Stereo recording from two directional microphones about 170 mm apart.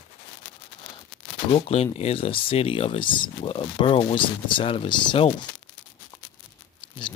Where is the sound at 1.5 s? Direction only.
35° left (ahead or behind).